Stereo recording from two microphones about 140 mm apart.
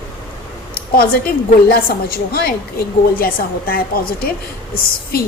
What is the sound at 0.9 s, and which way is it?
A woman's voice, 90° left.